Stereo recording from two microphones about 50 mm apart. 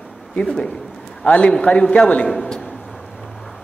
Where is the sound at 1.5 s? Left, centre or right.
Left.